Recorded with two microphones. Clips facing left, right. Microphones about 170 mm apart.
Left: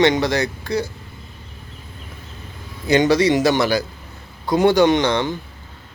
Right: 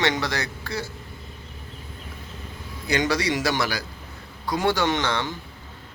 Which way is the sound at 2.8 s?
20° left (ahead or behind).